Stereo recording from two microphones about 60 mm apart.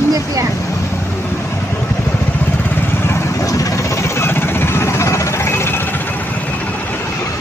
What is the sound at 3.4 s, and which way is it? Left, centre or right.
Vehicle, left.